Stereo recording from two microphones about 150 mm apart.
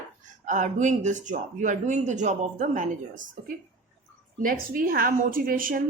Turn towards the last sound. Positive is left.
turn(degrees=-70)  # may be behind; listen again after turning